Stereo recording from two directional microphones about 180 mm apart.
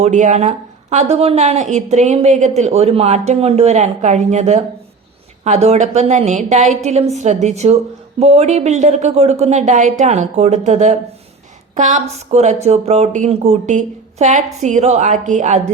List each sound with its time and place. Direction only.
0.0 s speech: 40° right (ahead or behind)